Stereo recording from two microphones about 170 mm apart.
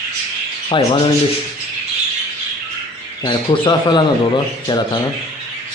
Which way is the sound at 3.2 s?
30° left (ahead or behind).